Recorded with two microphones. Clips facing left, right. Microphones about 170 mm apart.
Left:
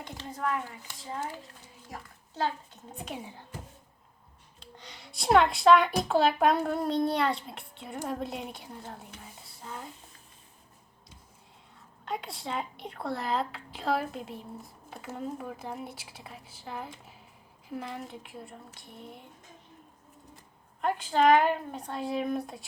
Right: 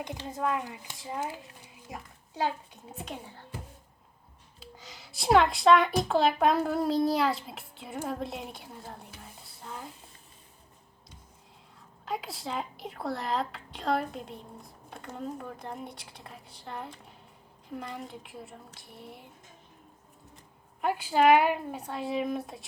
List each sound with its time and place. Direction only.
0.0 s speech: 15° right (ahead or behind)
1.9 s a sound: 10° right (ahead or behind)
2.9 s a woman's voice: centre (ahead or behind)
4.6 s music: centre (ahead or behind)
6.0 s a child's voice: centre (ahead or behind)
12.0 s a woman's voice: centre (ahead or behind)
20.8 s speech: 10° right (ahead or behind)